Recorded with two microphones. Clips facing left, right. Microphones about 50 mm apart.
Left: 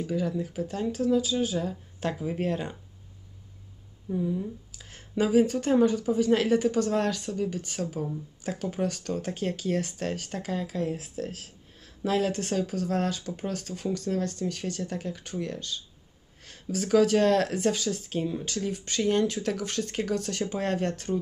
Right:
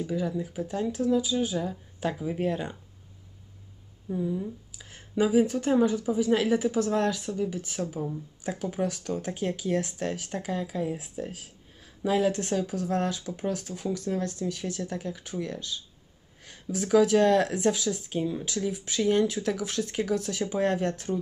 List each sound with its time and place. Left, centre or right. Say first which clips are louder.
0.0 s speech: left 1 dB; centre
4.1 s speech: left 1 dB; centre
7.8 s speech: even; centre
14.8 s speech: even; centre